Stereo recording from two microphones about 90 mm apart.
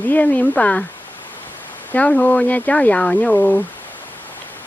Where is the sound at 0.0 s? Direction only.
20° left (ahead or behind).